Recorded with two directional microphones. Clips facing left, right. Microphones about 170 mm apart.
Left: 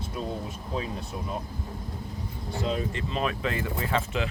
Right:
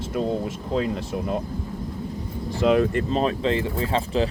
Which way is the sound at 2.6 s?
70° right (ahead or behind).